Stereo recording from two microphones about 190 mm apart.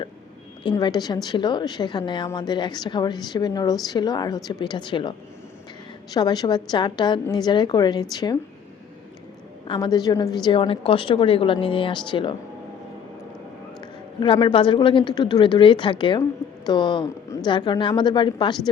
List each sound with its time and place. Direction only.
0.6 s a woman's voice: 20° left (ahead or behind)
6.1 s a woman's voice: 20° left (ahead or behind)
9.6 s a woman's voice: 20° left (ahead or behind)
14.2 s a woman's voice: 25° left (ahead or behind)